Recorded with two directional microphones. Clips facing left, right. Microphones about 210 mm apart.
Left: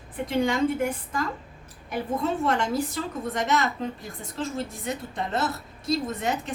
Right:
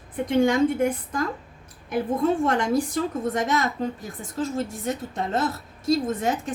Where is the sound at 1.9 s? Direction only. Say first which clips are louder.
Right 5 dB; 50° right (ahead or behind).